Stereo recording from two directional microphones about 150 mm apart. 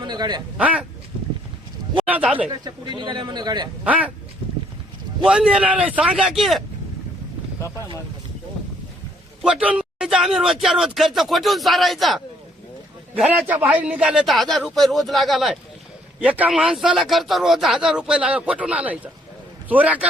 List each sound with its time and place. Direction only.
0.0 s a man's voice: 30° right (ahead or behind)
0.5 s speech: 10° right (ahead or behind)
2.0 s speech: 10° right (ahead or behind)
2.5 s a man's voice: 30° right (ahead or behind)
3.8 s speech: 10° right (ahead or behind)
5.2 s speech: 5° right (ahead or behind)
9.4 s speech: 5° right (ahead or behind)
13.5 s speech: 10° right (ahead or behind)